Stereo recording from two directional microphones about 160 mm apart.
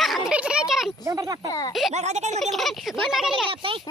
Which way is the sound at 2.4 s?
Centre (ahead or behind).